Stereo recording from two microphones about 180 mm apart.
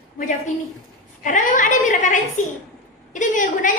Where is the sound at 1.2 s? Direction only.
45° left (ahead or behind).